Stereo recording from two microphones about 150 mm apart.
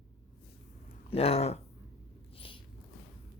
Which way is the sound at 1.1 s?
40° left (ahead or behind).